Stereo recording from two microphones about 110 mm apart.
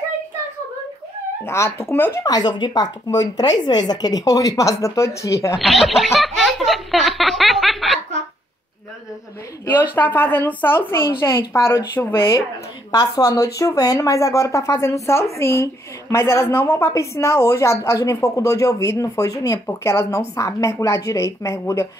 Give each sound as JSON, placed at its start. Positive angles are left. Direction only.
{"t": 1.4, "sound": "a woman's voice", "side_deg": 25}
{"t": 2.2, "sound": "a woman's voice", "side_deg": 40}
{"t": 5.6, "sound": "laughter", "side_deg": 0}
{"t": 9.7, "sound": "a woman's voice", "side_deg": 15}
{"t": 12.9, "sound": "a woman's voice", "side_deg": 35}